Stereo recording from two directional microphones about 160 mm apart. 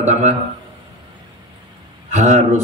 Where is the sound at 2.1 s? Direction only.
50° right (ahead or behind).